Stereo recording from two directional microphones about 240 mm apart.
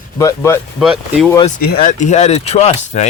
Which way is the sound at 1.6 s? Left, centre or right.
Left.